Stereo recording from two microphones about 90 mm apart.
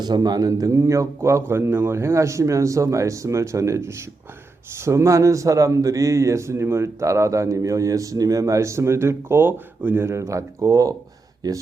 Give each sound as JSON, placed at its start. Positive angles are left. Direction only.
{"t": 0.0, "sound": "speech", "side_deg": -50}